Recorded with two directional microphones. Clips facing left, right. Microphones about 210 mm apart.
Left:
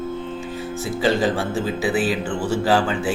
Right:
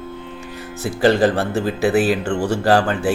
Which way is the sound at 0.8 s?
60° right (ahead or behind).